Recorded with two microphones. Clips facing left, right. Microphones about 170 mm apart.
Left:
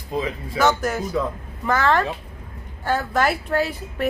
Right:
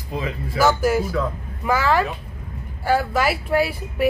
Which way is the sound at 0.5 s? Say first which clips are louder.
Right 3 dB; 5° right (ahead or behind).